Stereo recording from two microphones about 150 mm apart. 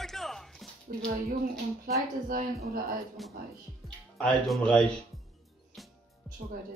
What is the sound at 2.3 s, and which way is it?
Speech, 65° right (ahead or behind).